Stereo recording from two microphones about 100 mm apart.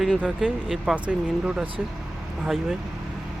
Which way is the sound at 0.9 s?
10° right (ahead or behind).